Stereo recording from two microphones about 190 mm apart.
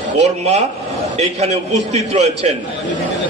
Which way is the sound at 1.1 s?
35° right (ahead or behind).